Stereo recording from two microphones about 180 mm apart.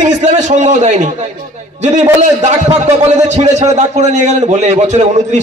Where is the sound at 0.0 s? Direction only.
40° right (ahead or behind).